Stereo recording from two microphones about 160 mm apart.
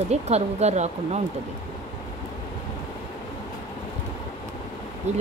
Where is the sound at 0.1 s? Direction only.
40° right (ahead or behind).